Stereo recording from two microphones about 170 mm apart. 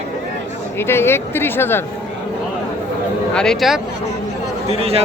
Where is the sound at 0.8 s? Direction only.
15° left (ahead or behind).